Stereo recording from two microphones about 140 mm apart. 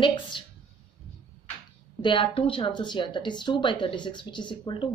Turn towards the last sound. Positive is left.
turn(degrees=35)  # may be behind; listen again after turning